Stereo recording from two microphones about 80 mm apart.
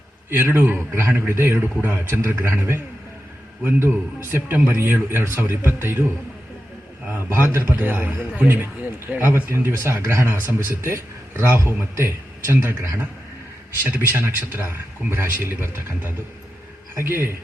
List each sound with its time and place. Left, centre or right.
0.3 s speech: right
7.1 s speech: right
13.8 s speech: right